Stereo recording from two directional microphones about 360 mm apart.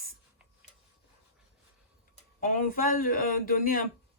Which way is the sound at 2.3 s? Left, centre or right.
Left.